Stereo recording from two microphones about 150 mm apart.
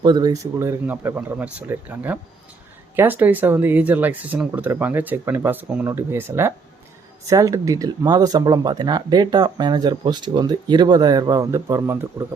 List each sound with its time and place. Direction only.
0.0 s speech: 25° right (ahead or behind)